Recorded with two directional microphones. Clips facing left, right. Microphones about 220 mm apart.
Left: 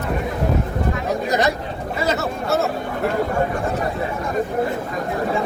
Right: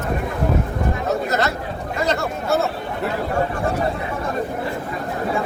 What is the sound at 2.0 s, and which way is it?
Speech, 5° left (ahead or behind).